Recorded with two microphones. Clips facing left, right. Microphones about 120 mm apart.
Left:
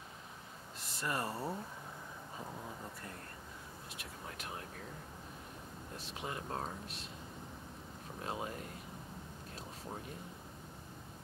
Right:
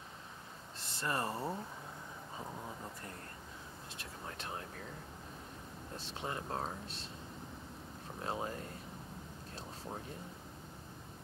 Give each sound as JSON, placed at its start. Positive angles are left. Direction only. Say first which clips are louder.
{"t": 0.7, "sound": "a sound", "louder": "right 1 dB", "side_deg": -30}
{"t": 4.0, "sound": "speech", "louder": "right 2 dB", "side_deg": -30}
{"t": 5.9, "sound": "speech", "louder": "right 2 dB", "side_deg": -30}
{"t": 8.2, "sound": "speech", "louder": "right 2 dB", "side_deg": -35}